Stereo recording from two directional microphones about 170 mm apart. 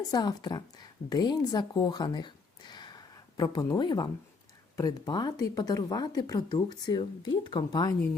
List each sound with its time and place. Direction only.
0.1 s speech: 25° left (ahead or behind)